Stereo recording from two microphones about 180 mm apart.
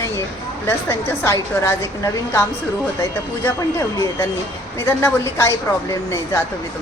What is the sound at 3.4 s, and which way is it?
A woman's voice, 20° left (ahead or behind).